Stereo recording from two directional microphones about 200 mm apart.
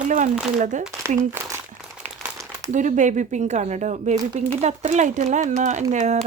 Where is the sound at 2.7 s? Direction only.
40° right (ahead or behind).